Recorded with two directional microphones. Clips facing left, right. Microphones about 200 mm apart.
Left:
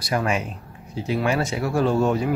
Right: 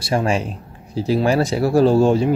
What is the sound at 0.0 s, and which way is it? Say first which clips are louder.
Speech: right 4 dB; 30° right (ahead or behind).